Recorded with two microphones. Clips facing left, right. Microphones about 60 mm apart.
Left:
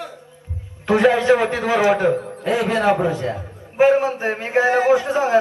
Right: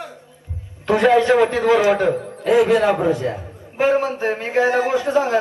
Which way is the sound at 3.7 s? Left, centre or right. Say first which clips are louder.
Left 3 dB; centre.